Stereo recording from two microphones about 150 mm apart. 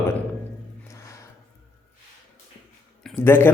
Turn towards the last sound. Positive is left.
turn(degrees=15)  # may be behind; listen again after turning